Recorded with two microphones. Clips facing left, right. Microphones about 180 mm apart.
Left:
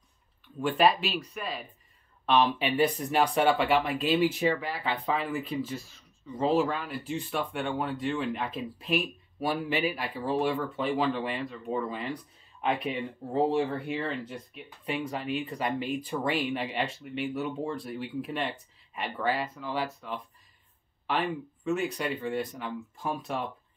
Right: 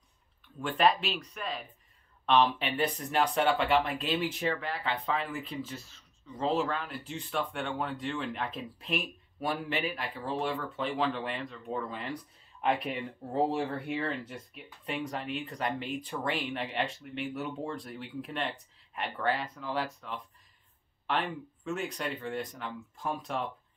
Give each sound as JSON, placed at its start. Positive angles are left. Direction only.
{"t": 0.6, "sound": "speech", "side_deg": 5}
{"t": 21.6, "sound": "speech", "side_deg": 5}